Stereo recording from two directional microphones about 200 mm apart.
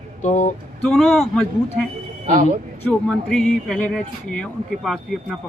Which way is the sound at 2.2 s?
40° right (ahead or behind).